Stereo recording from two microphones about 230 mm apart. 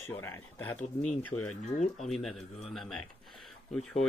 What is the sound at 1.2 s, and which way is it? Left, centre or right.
Speech, left.